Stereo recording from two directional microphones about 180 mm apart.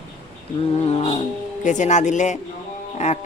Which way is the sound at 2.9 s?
40° left (ahead or behind).